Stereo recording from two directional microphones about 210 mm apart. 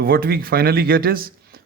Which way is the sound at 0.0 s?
45° right (ahead or behind).